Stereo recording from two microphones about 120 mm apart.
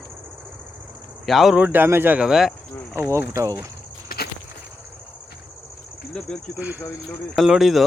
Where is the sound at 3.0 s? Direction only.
20° right (ahead or behind).